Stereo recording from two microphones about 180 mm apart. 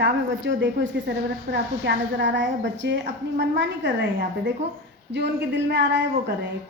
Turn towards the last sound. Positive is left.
turn(degrees=-75)  # may be behind; listen again after turning